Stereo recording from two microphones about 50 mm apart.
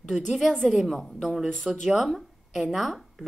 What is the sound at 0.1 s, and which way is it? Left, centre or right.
A woman's voice, centre.